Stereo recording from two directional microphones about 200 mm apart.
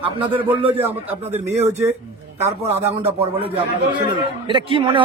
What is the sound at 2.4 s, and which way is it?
A man's voice, 30° right (ahead or behind).